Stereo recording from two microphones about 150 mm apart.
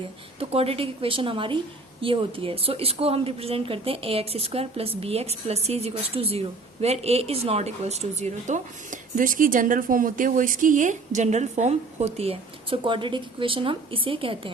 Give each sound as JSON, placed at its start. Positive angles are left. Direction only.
{"t": 0.3, "sound": "a woman's voice", "side_deg": -40}